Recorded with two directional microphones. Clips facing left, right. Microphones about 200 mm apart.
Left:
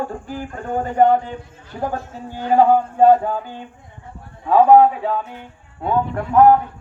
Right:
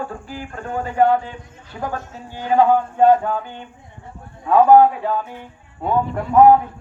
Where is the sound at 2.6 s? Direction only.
10° left (ahead or behind).